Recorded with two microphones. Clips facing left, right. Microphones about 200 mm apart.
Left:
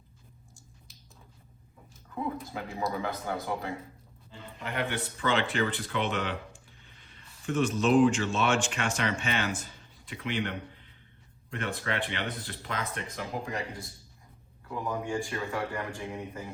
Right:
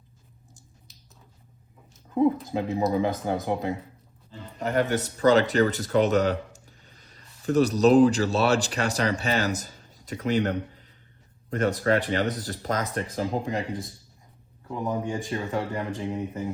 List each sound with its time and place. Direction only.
2.0 s speech: 20° right (ahead or behind)
4.3 s speech: 40° right (ahead or behind); by 16.4 s 20° right (ahead or behind)